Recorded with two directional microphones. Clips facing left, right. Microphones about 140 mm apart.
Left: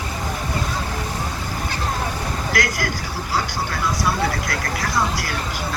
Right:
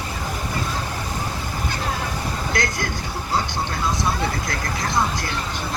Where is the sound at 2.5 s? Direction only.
25° right (ahead or behind).